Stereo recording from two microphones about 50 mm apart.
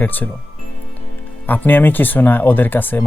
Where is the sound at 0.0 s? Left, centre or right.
Left.